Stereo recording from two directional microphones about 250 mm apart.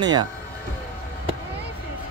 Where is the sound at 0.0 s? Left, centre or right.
Centre.